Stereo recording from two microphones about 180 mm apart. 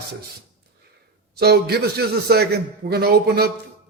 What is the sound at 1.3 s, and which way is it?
A man's voice, 65° right (ahead or behind).